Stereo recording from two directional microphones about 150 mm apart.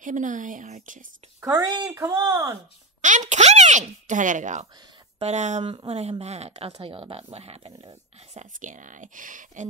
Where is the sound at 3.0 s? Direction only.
55° right (ahead or behind).